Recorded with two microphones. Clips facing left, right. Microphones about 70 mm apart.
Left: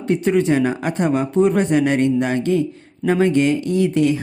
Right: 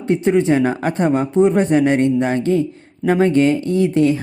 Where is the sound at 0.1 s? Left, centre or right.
Right.